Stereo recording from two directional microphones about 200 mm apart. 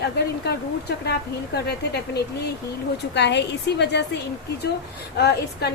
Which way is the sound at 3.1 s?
60° left (ahead or behind).